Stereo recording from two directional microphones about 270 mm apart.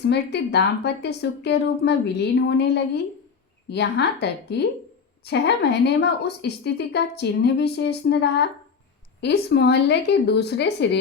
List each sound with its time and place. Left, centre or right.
0.0 s a woman's voice: left